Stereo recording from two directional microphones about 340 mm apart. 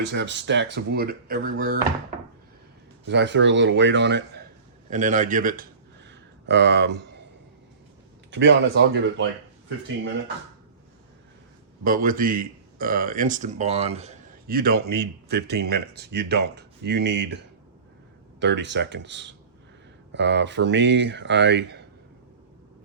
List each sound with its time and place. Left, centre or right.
0.0 s speech: right
3.1 s speech: right
6.1 s a sound: right
8.3 s speech: right
11.8 s speech: right